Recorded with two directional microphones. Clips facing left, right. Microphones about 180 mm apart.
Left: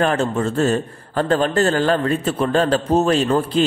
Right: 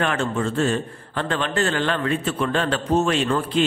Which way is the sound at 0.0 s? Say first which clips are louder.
Left 4 dB; 40° left (ahead or behind).